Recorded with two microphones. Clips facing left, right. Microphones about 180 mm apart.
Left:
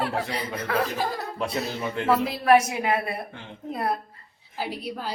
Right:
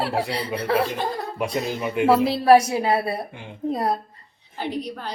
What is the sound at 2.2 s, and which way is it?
Speech, 35° right (ahead or behind).